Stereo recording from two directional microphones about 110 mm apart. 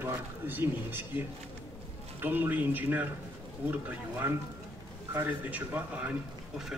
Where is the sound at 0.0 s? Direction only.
20° right (ahead or behind).